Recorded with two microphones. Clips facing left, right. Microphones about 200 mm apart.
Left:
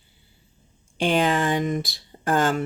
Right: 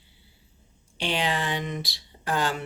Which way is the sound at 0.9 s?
50° left (ahead or behind).